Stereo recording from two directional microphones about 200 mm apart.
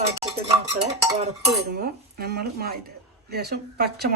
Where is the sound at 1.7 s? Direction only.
50° right (ahead or behind).